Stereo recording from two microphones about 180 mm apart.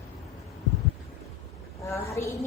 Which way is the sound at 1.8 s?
15° left (ahead or behind).